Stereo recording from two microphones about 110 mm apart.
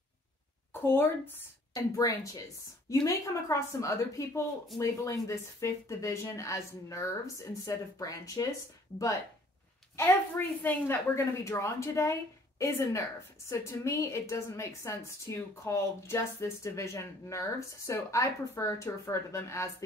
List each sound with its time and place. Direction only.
0.7 s a woman's voice: 20° left (ahead or behind)
1.7 s a woman's voice: 35° left (ahead or behind)
9.9 s a woman's voice: 20° left (ahead or behind)